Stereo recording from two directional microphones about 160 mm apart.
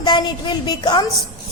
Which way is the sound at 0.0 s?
25° left (ahead or behind).